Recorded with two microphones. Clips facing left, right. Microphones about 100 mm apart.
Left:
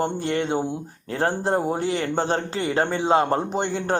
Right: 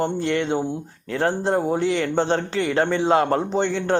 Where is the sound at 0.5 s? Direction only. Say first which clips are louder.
Right 1 dB; 15° left (ahead or behind).